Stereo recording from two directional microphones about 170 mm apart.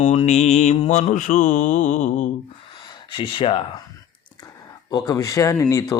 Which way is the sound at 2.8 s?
30° left (ahead or behind).